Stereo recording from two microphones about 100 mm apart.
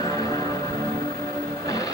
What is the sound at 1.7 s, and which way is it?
Music, 40° left (ahead or behind).